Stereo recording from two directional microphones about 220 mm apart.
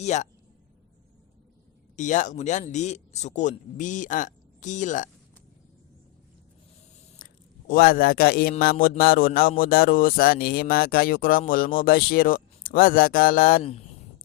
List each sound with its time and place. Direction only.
0.0 s a man's voice: 30° left (ahead or behind)
2.0 s a man's voice: 35° left (ahead or behind)
7.2 s a sound: 40° left (ahead or behind)
7.7 s a man's voice: 40° left (ahead or behind)